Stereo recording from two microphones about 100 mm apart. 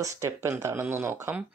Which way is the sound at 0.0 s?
30° right (ahead or behind).